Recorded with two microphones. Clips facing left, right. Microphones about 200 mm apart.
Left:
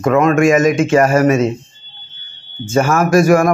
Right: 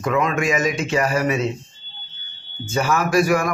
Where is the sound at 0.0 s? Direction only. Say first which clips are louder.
Left 9 dB; 50° left (ahead or behind).